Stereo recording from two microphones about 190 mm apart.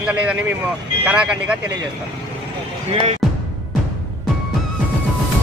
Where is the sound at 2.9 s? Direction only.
30° right (ahead or behind).